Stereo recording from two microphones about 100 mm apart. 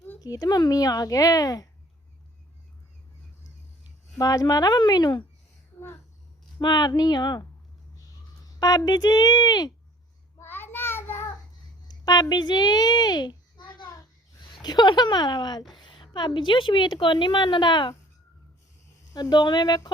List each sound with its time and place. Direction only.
0.2 s speech: 40° left (ahead or behind)
4.2 s speech: 40° left (ahead or behind)
6.6 s a woman's voice: 45° left (ahead or behind)
8.5 s a woman's voice: 40° left (ahead or behind)
10.4 s child singing: 20° left (ahead or behind)
11.9 s a child's voice: 40° left (ahead or behind)
19.1 s a woman's voice: 45° left (ahead or behind)